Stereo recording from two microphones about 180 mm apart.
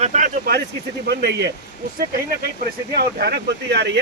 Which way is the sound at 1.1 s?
65° right (ahead or behind).